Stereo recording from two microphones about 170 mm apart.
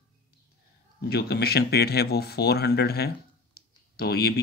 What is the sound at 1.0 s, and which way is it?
Speech, 65° left (ahead or behind).